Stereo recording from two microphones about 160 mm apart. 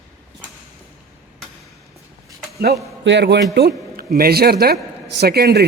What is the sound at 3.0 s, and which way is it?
Speech, 90° right.